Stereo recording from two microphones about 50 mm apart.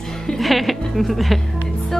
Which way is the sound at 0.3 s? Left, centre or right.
Centre.